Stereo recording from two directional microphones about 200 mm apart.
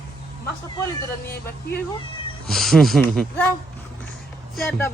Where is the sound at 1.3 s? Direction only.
50° left (ahead or behind).